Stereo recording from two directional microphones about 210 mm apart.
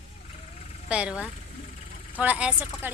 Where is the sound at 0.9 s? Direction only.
5° right (ahead or behind).